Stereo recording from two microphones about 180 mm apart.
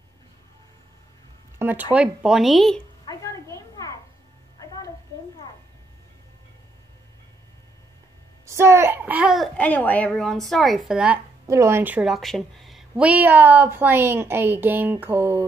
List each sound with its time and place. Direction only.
1.6 s a woman's voice: 10° right (ahead or behind)
3.1 s a sound: 15° left (ahead or behind)
8.5 s a woman's voice: 15° right (ahead or behind)
9.6 s a woman's voice: 10° left (ahead or behind)
11.4 s a woman's voice: 15° right (ahead or behind)